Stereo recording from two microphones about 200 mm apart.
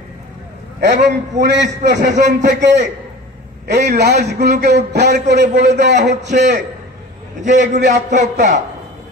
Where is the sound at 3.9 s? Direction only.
55° right (ahead or behind).